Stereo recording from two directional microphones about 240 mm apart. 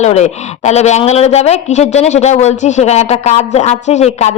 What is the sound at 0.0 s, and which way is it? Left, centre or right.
A woman's voice, left.